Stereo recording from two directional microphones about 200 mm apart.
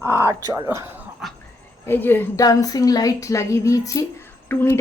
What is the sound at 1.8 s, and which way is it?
Speech, 10° left (ahead or behind).